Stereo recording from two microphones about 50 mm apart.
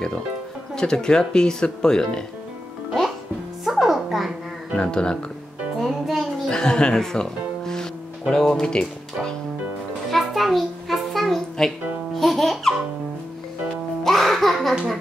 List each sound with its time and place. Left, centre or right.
0.7 s speech: centre
3.6 s music: centre
4.8 s speech: centre
5.8 s music: centre
6.5 s music: centre
8.3 s speech: centre
10.1 s music: centre
14.0 s music: centre